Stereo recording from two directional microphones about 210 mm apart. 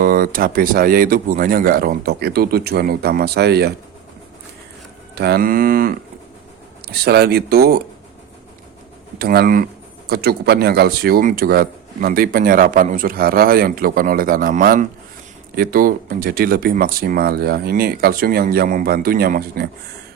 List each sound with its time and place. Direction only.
0.0 s speech: 40° right (ahead or behind)
5.1 s speech: 50° right (ahead or behind)
9.1 s speech: 50° right (ahead or behind)